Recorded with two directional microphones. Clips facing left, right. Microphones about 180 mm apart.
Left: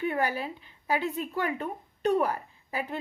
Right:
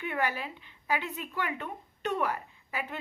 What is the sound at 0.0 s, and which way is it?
A woman's voice, 35° left (ahead or behind).